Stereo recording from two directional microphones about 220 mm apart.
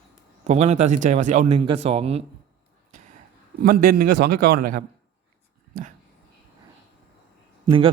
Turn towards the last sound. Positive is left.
turn(degrees=-25)  # may be behind; listen again after turning